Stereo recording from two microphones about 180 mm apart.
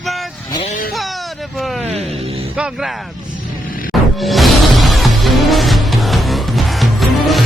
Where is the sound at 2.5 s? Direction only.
5° right (ahead or behind).